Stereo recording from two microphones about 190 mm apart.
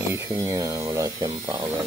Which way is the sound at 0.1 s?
15° right (ahead or behind).